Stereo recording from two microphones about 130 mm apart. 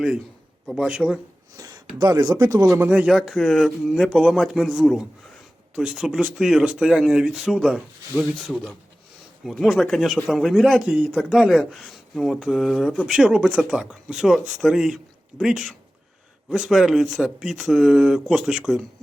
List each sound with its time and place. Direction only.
0.7 s speech: 5° right (ahead or behind)
1.5 s a sound: 25° right (ahead or behind)
2.0 s speech: 30° right (ahead or behind)
3.1 s speech: centre (ahead or behind)